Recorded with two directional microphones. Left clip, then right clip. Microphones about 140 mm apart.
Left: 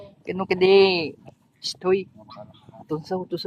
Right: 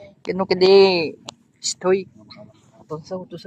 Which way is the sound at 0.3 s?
20° right (ahead or behind).